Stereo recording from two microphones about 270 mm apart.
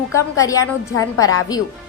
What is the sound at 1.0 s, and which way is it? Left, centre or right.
Speech, left.